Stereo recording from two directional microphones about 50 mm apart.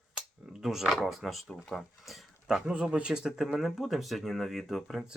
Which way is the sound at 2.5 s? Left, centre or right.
Centre.